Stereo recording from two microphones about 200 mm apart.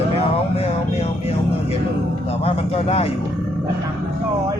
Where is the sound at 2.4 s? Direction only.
30° left (ahead or behind).